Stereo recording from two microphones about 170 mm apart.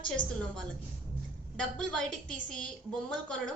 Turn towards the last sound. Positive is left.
turn(degrees=5)  # may be behind; listen again after turning